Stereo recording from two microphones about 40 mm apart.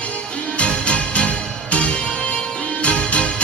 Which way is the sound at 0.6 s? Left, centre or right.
Left.